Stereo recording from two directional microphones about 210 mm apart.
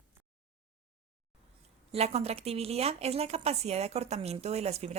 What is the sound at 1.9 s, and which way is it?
Speech, 30° right (ahead or behind).